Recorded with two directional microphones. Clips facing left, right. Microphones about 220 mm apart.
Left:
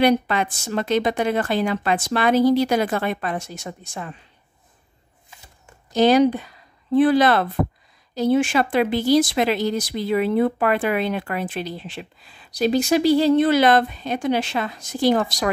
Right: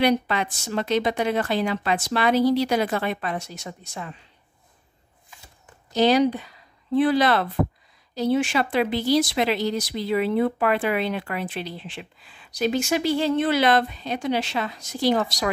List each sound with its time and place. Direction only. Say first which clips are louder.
0.0 s speech: left 3 dB; 50° left (ahead or behind)
5.9 s speech: left 3 dB; 50° left (ahead or behind)